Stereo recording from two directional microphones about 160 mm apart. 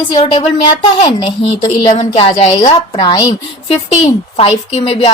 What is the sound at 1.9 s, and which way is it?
A woman's voice, 35° left (ahead or behind).